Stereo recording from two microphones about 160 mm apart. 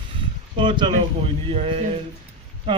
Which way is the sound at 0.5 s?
30° right (ahead or behind).